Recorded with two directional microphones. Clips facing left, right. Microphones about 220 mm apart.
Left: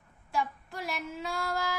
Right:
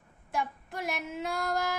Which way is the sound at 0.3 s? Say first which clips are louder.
Left 1 dB; 20° right (ahead or behind).